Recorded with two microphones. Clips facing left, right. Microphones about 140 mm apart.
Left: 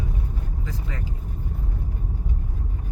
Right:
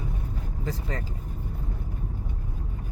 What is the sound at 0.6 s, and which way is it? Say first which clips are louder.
Vehicle: right 5 dB; 40° right (ahead or behind).